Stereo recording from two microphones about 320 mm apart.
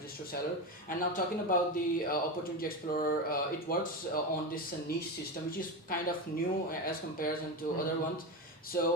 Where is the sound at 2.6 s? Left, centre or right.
Left.